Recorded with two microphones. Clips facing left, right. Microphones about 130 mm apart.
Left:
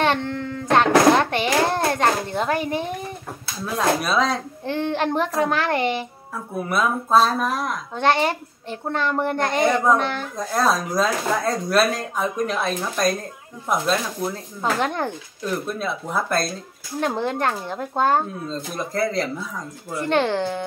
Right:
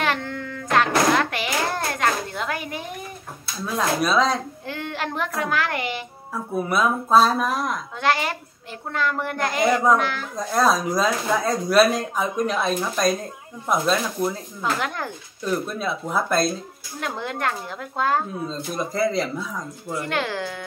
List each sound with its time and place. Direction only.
0.0 s a sound: 30° left (ahead or behind)
3.7 s speech: 5° left (ahead or behind)
4.6 s a child's voice: 30° left (ahead or behind)
6.5 s speech: centre (ahead or behind)
7.9 s a child's voice: 30° left (ahead or behind)
9.6 s speech: centre (ahead or behind)
9.9 s a child's voice: 30° left (ahead or behind)
10.3 s speech: centre (ahead or behind)
14.6 s a child's voice: 30° left (ahead or behind)
15.8 s speech: centre (ahead or behind)
17.0 s a child's voice: 35° left (ahead or behind)
18.5 s speech: centre (ahead or behind)
20.1 s a child's voice: 25° left (ahead or behind)